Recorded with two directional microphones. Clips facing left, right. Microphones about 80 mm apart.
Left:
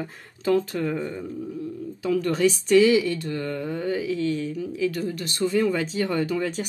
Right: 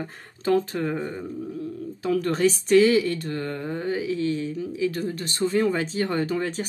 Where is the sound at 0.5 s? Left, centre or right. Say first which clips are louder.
Even; right.